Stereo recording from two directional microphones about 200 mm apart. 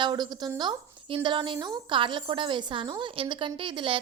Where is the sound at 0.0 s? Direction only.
20° right (ahead or behind).